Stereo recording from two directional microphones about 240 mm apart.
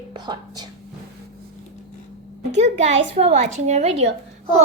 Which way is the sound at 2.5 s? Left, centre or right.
Right.